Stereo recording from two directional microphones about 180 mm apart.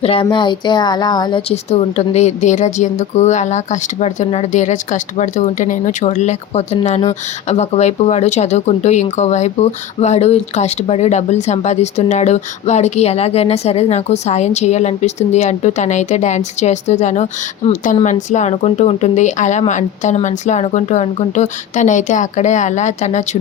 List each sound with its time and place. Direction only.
0.0 s a woman's voice: 30° left (ahead or behind)